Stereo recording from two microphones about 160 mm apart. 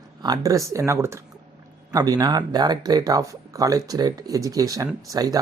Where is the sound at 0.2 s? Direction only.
25° right (ahead or behind).